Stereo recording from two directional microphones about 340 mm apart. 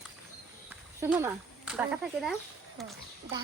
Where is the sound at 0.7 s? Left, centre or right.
Centre.